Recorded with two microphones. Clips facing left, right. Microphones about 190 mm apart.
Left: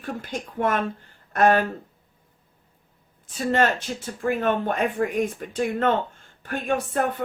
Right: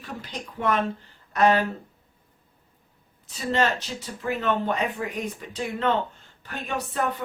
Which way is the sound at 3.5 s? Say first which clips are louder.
Left 2 dB; 50° left (ahead or behind).